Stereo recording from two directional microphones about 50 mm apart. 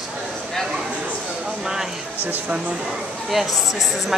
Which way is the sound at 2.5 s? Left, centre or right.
Right.